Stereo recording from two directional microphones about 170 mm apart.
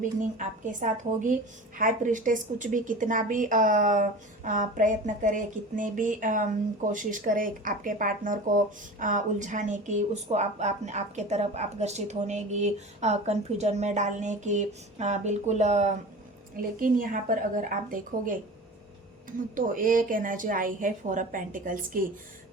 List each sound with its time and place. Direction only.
0.0 s a woman's voice: 50° right (ahead or behind)
16.8 s a woman's voice: 55° right (ahead or behind)
19.5 s a woman's voice: 55° right (ahead or behind)